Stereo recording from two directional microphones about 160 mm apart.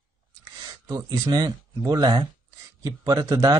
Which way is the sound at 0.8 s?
20° right (ahead or behind).